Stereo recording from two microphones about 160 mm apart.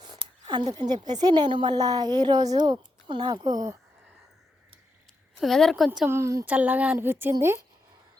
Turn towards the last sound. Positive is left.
turn(degrees=-15)  # may be behind; listen again after turning